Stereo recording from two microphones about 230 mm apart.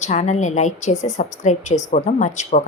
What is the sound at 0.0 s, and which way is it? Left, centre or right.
Speech, left.